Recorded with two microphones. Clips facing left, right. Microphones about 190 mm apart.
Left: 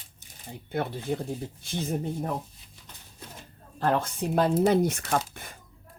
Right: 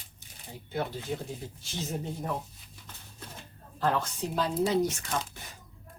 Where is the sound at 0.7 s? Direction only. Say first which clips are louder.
Left 3 dB; 55° left (ahead or behind).